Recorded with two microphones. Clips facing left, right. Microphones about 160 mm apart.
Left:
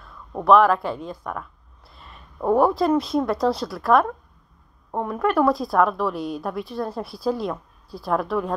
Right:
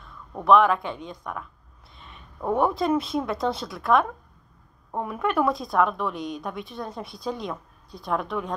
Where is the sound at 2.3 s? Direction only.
30° left (ahead or behind).